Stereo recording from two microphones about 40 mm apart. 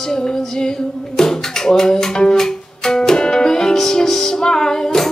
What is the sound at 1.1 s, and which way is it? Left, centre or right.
Music, centre.